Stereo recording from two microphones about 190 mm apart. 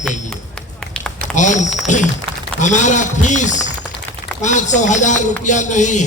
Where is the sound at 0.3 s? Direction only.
5° left (ahead or behind).